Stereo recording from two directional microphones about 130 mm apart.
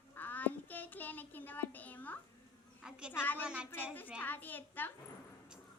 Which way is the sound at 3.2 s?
15° left (ahead or behind).